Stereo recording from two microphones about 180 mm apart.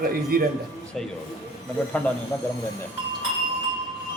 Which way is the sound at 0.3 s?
55° right (ahead or behind).